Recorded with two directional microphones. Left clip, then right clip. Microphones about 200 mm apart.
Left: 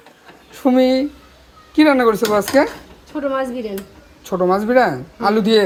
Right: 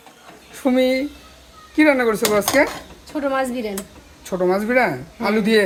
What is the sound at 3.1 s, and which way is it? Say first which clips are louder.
Speech: left 1 dB; 15° right (ahead or behind).